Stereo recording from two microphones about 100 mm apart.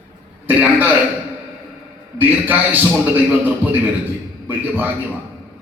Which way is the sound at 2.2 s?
20° right (ahead or behind).